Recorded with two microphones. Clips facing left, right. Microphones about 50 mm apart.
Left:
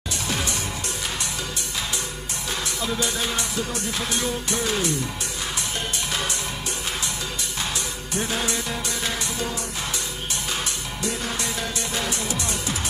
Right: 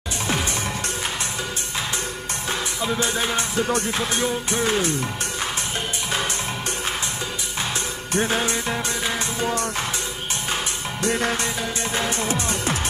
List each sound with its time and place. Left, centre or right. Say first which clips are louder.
3.0 s music: right 3 dB; right
8.1 s music: right 5 dB; right
11.0 s music: right 7 dB; right
11.4 s music: right 2 dB; right